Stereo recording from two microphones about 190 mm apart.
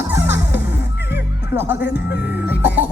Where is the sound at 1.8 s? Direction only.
65° left (ahead or behind).